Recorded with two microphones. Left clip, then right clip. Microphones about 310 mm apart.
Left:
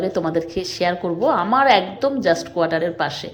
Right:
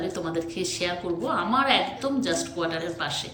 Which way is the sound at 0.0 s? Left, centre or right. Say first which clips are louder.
Left 8 dB; centre.